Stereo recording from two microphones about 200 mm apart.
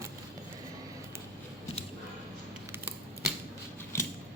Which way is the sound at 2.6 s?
10° right (ahead or behind).